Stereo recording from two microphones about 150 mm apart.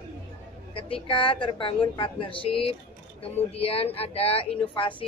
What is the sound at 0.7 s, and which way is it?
Child singing, 35° left (ahead or behind).